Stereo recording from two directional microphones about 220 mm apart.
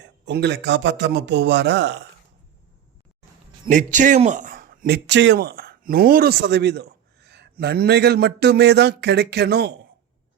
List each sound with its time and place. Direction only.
0.0 s speech: 50° right (ahead or behind)
3.7 s a man's voice: 35° right (ahead or behind)